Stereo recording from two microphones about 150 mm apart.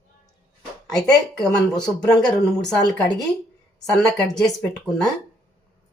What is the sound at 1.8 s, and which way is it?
Speech, 5° left (ahead or behind).